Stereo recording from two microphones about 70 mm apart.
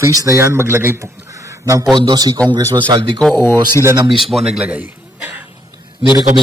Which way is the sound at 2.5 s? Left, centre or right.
Right.